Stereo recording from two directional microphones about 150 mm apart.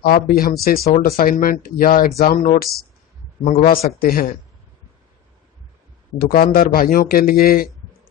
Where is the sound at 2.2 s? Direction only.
60° left (ahead or behind).